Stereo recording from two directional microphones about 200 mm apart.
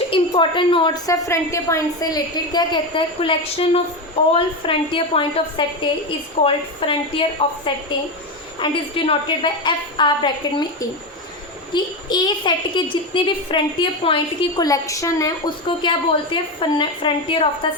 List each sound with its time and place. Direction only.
0.1 s a woman's voice: 25° left (ahead or behind)